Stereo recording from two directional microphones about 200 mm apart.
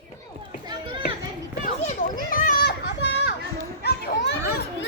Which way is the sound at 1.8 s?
40° left (ahead or behind).